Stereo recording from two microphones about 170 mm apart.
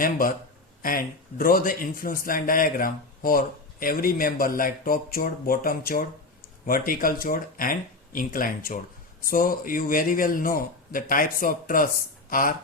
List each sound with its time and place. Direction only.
0.0 s speech: 55° left (ahead or behind)